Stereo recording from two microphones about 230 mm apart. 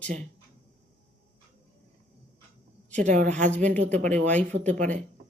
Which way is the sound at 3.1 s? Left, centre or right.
Right.